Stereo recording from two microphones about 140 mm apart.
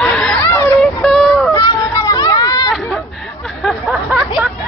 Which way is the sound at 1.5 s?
25° left (ahead or behind).